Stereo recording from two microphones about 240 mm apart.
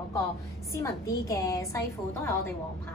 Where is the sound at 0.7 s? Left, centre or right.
Centre.